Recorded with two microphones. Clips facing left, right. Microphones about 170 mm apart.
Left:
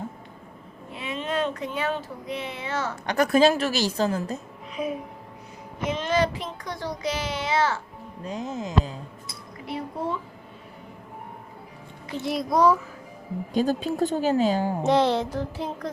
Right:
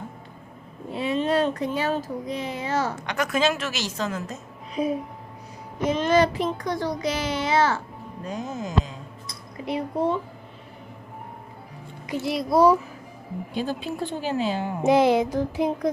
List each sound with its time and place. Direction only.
0.9 s speech: 35° right (ahead or behind)
3.1 s a woman's voice: 35° left (ahead or behind)
4.7 s a child's voice: 35° right (ahead or behind)
8.3 s speech: 25° left (ahead or behind)
9.6 s a sound: 20° right (ahead or behind)
12.0 s a child's voice: 5° right (ahead or behind)
13.5 s a woman's voice: 40° left (ahead or behind)
14.8 s a sound: 10° right (ahead or behind)